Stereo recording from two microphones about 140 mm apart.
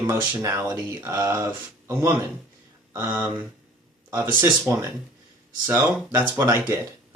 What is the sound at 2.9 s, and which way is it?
Speech, 15° right (ahead or behind).